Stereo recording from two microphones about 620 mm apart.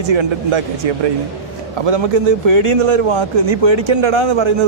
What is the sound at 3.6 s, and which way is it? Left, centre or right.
Speech, right.